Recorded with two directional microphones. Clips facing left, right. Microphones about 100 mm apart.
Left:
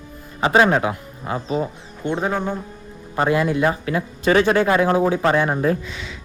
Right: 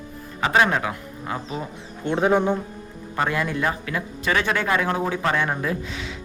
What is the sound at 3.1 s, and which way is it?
A man's voice, 20° left (ahead or behind).